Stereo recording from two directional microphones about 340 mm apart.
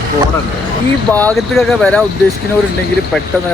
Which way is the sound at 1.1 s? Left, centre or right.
Centre.